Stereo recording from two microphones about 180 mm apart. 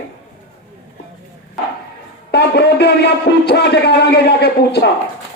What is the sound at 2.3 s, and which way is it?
A man's voice, 65° left (ahead or behind).